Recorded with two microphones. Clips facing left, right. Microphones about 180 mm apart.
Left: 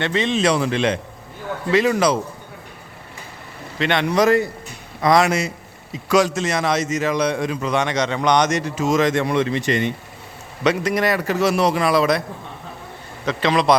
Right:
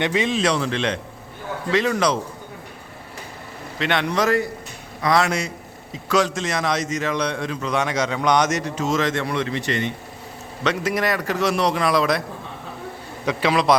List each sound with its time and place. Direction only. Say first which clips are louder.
0.0 s a man's voice: even; 10° right (ahead or behind)
0.3 s a man's voice: left 3 dB; 5° left (ahead or behind)
3.8 s a man's voice: left 2 dB; centre (ahead or behind)
4.1 s a man's voice: left 7 dB; 20° left (ahead or behind)
10.8 s a man's voice: left 3 dB; centre (ahead or behind)
13.2 s a man's voice: left 1 dB; 5° right (ahead or behind)